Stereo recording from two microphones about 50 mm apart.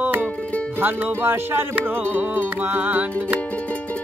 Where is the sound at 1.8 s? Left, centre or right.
Right.